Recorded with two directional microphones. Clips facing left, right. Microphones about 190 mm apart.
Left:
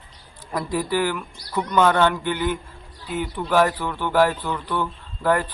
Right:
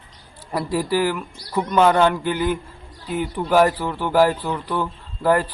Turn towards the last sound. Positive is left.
turn(degrees=-5)  # may be behind; listen again after turning